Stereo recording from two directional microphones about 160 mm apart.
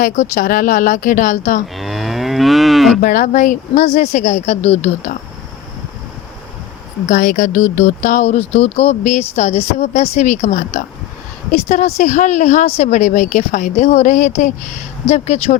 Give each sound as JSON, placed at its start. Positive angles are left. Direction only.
{"t": 0.0, "sound": "a woman's voice", "side_deg": 55}
{"t": 1.6, "sound": "moo", "side_deg": 0}
{"t": 3.0, "sound": "speech", "side_deg": 55}
{"t": 7.1, "sound": "speech", "side_deg": 55}